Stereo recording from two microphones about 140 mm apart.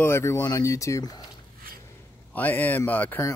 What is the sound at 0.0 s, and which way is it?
Speech, 20° left (ahead or behind).